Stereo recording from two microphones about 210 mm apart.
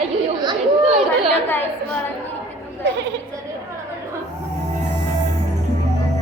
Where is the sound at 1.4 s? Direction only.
10° left (ahead or behind).